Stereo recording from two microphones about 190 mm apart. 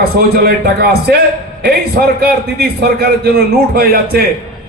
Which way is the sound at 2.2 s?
55° right (ahead or behind).